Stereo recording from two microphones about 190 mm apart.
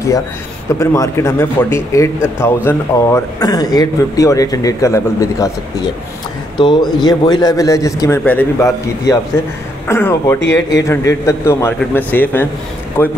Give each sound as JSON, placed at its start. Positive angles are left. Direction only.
{"t": 0.7, "sound": "a man's voice", "side_deg": 15}